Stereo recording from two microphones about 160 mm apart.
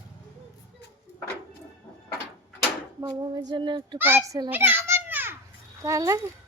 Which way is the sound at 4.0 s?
15° right (ahead or behind).